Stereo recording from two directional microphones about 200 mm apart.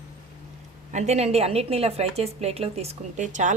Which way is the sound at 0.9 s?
35° right (ahead or behind).